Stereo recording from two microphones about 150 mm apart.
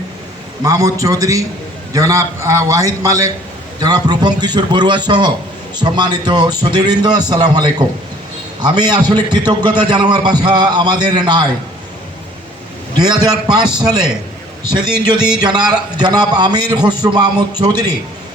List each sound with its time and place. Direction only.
0.6 s a man's voice: 25° right (ahead or behind)
13.0 s a man's voice: 30° right (ahead or behind)